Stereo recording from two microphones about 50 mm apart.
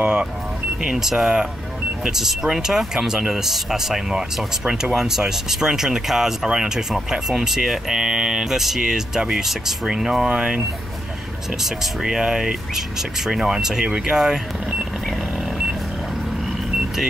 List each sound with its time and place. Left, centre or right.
0.0 s speech: right
0.8 s speech: centre
11.6 s speech: centre